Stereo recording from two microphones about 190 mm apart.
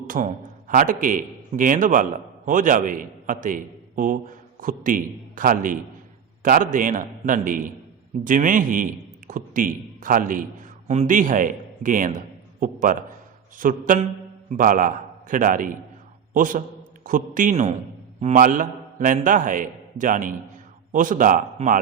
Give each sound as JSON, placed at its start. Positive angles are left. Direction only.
{"t": 0.1, "sound": "a man's voice", "side_deg": -40}